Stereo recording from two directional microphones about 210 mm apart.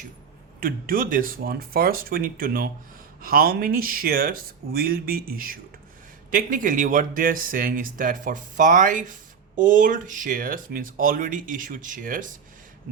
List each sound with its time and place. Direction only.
0.6 s speech: 40° right (ahead or behind)